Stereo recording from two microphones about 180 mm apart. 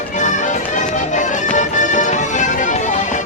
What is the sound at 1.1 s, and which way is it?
Music, 40° left (ahead or behind).